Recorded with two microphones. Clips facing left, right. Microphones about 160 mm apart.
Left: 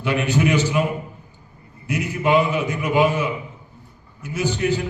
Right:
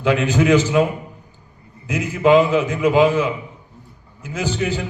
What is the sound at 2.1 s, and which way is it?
Speech, 90° right.